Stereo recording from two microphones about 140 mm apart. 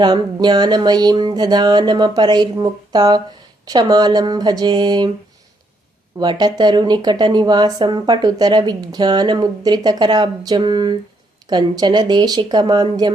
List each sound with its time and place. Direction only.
0.0 s speech: 30° right (ahead or behind)
6.1 s speech: 30° right (ahead or behind)